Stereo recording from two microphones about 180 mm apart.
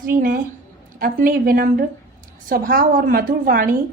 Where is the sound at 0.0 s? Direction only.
50° right (ahead or behind).